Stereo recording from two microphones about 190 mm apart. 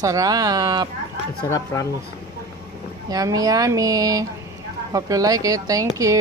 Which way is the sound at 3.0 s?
20° right (ahead or behind).